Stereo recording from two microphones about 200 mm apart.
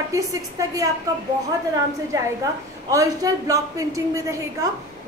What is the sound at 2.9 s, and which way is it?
A woman's voice, 15° right (ahead or behind).